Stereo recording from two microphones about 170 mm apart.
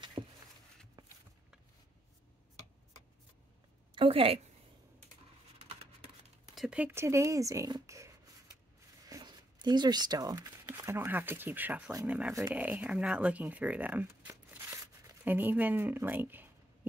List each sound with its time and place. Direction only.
0.2 s a sound: 25° right (ahead or behind)
3.9 s a woman's voice: 35° right (ahead or behind)
6.5 s speech: 5° right (ahead or behind)
9.1 s speech: 25° right (ahead or behind)